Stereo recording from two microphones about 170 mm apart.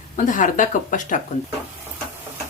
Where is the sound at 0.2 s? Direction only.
50° left (ahead or behind).